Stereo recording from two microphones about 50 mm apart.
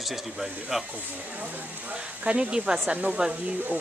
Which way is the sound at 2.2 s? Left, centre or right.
Right.